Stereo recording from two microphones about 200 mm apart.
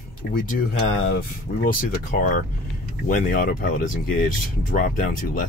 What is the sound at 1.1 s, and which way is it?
Speech, 45° left (ahead or behind).